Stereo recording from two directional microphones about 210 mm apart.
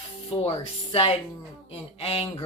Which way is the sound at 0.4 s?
30° left (ahead or behind).